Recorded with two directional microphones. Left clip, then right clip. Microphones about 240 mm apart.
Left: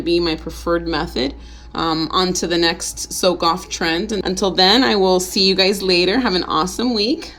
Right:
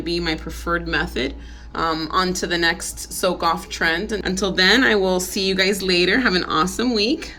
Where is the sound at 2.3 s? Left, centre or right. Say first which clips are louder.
Left 3 dB; left.